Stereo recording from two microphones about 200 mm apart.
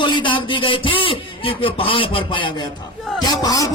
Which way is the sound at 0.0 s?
25° left (ahead or behind).